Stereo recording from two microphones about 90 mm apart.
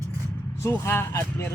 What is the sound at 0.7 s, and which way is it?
Speech, 25° left (ahead or behind).